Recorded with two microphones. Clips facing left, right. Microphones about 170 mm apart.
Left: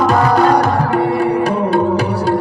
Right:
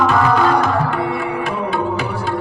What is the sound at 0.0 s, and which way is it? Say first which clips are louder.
Tabla: left 3 dB; 40° left (ahead or behind).